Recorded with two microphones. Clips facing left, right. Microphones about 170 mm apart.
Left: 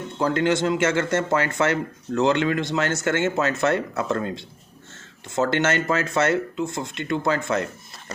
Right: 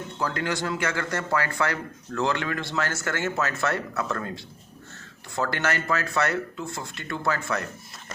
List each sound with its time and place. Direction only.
0.2 s speech: 25° left (ahead or behind)